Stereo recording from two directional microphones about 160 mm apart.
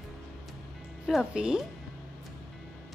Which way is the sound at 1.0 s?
5° right (ahead or behind).